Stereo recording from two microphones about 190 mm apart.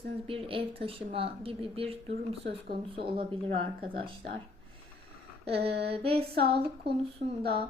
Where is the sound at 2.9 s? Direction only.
30° right (ahead or behind).